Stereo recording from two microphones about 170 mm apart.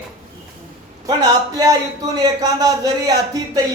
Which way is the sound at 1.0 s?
20° right (ahead or behind).